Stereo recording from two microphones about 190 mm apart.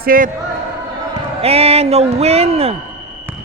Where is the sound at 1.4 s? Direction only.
30° right (ahead or behind).